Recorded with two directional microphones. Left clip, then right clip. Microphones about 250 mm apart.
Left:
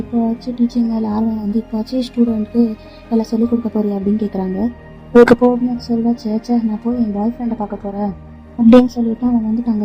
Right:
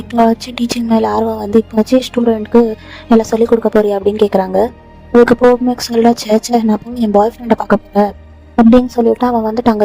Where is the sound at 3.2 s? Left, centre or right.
Right.